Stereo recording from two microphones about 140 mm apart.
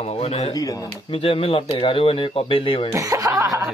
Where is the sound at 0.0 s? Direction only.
50° left (ahead or behind).